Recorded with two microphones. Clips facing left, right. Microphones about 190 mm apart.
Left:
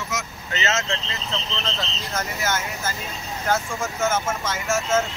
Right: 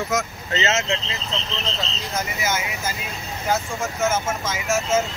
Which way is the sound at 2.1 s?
5° right (ahead or behind).